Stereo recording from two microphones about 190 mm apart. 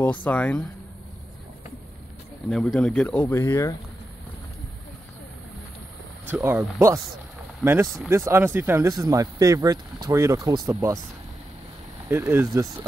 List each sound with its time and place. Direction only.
0.0 s speech: 10° left (ahead or behind)
2.5 s speech: 5° left (ahead or behind)
6.2 s speech: 10° right (ahead or behind)
12.1 s speech: 15° right (ahead or behind)